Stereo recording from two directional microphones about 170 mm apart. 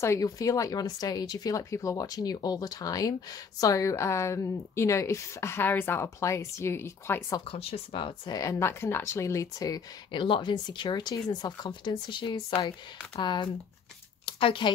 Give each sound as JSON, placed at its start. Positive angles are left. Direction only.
{"t": 0.0, "sound": "a woman's voice", "side_deg": 20}
{"t": 7.5, "sound": "speech", "side_deg": 35}
{"t": 14.2, "sound": "a sound", "side_deg": 30}